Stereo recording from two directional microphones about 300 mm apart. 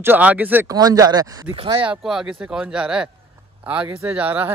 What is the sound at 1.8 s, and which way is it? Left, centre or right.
Speech, centre.